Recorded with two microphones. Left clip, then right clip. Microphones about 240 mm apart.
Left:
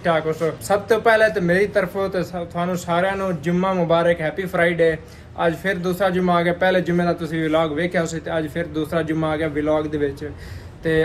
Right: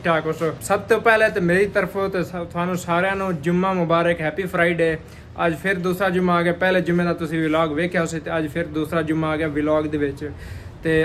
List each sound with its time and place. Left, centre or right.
0.0 s speech: centre